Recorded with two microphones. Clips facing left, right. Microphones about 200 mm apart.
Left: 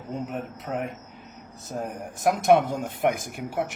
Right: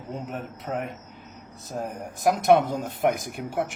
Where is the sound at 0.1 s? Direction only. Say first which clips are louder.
Left 2 dB; centre (ahead or behind).